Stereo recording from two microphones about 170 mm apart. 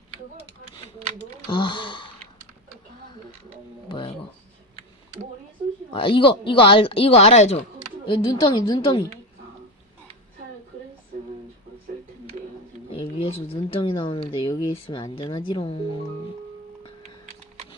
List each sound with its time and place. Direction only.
1.5 s speech: 25° left (ahead or behind)
3.8 s music: 30° left (ahead or behind)
5.9 s a woman's voice: 30° left (ahead or behind)
12.9 s speech: 35° left (ahead or behind)